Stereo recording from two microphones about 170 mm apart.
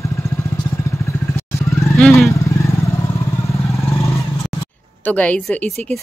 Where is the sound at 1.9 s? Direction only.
5° left (ahead or behind).